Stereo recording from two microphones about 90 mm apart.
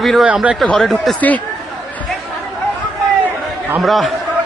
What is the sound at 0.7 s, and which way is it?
Speech, centre (ahead or behind).